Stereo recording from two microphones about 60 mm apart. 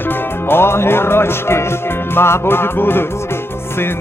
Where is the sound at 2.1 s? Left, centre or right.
Left.